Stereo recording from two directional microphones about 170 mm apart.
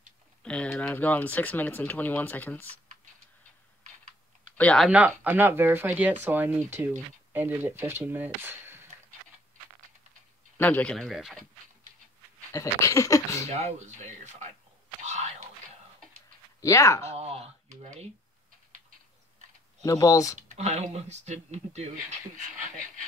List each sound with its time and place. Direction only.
0.4 s speech: 5° left (ahead or behind)
4.6 s speech: 5° left (ahead or behind); by 8.8 s 15° right (ahead or behind)
10.6 s speech: 10° left (ahead or behind)
12.5 s speech: 20° left (ahead or behind)
13.5 s speech: 40° right (ahead or behind)
15.0 s whispering: 45° right (ahead or behind)
16.6 s speech: 15° left (ahead or behind)
17.1 s speech: 40° right (ahead or behind)
19.8 s speech: 20° left (ahead or behind)
20.4 s speech: 40° right (ahead or behind)